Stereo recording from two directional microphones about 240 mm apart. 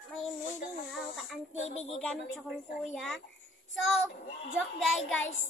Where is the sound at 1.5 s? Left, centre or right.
Left.